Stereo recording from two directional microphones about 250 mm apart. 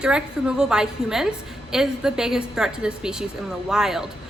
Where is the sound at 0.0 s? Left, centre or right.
Centre.